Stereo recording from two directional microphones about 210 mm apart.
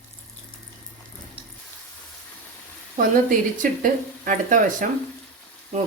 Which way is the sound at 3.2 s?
40° right (ahead or behind).